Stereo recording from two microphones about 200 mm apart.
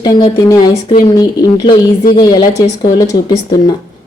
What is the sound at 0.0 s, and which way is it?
A woman's voice, 20° left (ahead or behind).